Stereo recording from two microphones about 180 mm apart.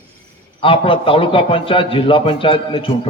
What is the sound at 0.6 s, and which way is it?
A man's voice, 30° left (ahead or behind).